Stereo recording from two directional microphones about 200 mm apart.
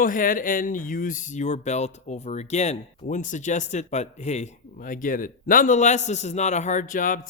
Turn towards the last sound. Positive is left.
turn(degrees=40)  # may be behind; listen again after turning